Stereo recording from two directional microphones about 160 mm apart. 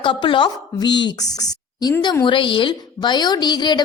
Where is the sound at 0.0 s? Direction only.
30° left (ahead or behind).